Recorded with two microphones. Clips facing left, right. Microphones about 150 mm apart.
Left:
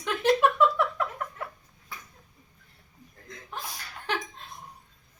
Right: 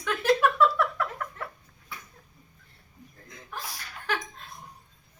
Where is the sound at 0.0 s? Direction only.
20° left (ahead or behind).